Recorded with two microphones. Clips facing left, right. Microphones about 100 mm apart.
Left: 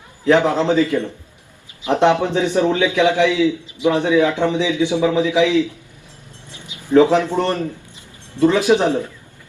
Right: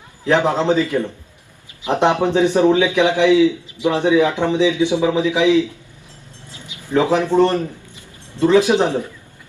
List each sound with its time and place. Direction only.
0.3 s a man's voice: 20° right (ahead or behind)
6.5 s a sound: 20° left (ahead or behind)
6.9 s a man's voice: 20° right (ahead or behind)